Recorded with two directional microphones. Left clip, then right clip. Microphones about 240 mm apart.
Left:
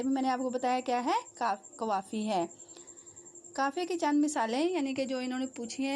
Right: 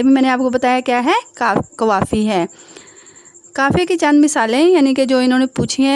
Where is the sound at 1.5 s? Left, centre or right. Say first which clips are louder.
Right 19 dB; right.